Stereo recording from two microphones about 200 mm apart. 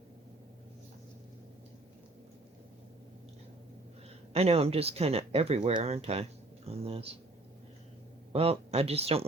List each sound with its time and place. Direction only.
4.3 s speech: 30° right (ahead or behind)
8.3 s speech: 30° right (ahead or behind)